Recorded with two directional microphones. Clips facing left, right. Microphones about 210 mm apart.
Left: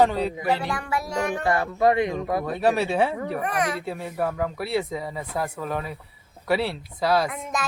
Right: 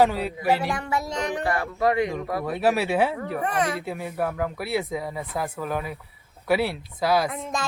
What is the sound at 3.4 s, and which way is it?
Speech, 30° right (ahead or behind).